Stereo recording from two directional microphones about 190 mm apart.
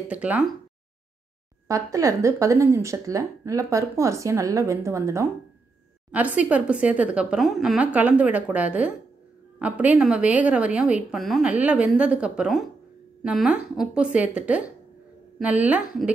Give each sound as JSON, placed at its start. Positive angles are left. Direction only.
{"t": 0.1, "sound": "speech", "side_deg": -5}
{"t": 1.7, "sound": "a woman's voice", "side_deg": -15}